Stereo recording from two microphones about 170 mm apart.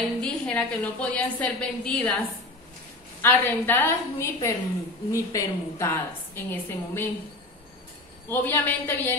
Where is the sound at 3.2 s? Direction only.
10° left (ahead or behind).